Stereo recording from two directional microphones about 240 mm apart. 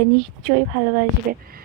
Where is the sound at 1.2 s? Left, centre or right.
Right.